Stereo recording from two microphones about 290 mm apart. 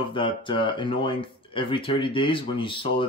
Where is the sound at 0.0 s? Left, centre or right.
Centre.